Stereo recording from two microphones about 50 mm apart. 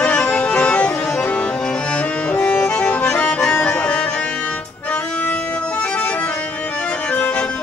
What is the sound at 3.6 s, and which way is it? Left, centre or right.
Music, left.